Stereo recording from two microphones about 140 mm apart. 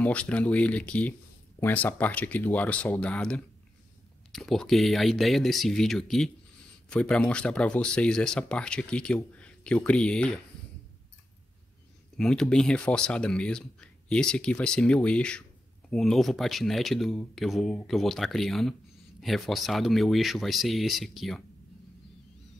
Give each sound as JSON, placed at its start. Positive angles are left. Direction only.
{"t": 0.0, "sound": "speech", "side_deg": 10}
{"t": 12.2, "sound": "speech", "side_deg": 5}